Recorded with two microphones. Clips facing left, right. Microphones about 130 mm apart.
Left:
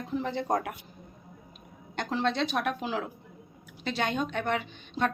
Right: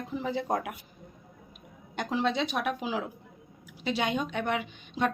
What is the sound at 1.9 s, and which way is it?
A woman's voice, 10° right (ahead or behind).